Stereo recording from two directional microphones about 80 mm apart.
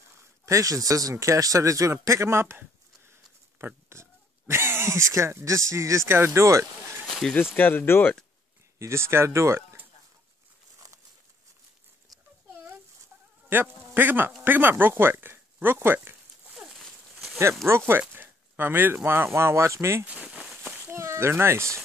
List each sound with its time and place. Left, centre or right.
0.5 s a man's voice: right
3.1 s pig: right
7.1 s speech: centre
7.5 s speech: left
8.7 s speech: right
10.8 s crumpling: right
13.5 s a man's voice: right
16.5 s a sound: centre
17.6 s speech: right
20.1 s a sound: centre
20.8 s speech: right